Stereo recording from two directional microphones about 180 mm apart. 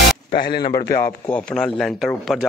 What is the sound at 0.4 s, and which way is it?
Speech, 60° left (ahead or behind).